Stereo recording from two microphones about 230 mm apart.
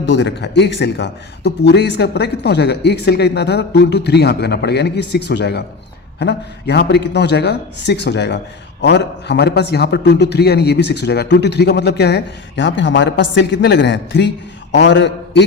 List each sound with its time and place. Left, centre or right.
0.0 s a man's voice: left